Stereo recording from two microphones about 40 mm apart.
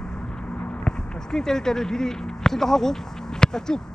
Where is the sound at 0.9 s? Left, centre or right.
Left.